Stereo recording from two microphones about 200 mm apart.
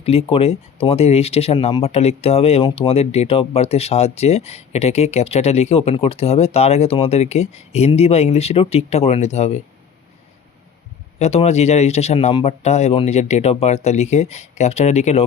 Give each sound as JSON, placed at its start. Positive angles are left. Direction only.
{"t": 0.0, "sound": "speech", "side_deg": 30}
{"t": 11.2, "sound": "speech", "side_deg": 30}